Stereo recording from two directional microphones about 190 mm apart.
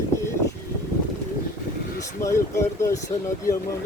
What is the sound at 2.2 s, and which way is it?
Speech, 15° left (ahead or behind).